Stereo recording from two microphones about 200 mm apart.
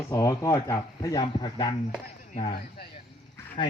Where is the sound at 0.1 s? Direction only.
15° left (ahead or behind).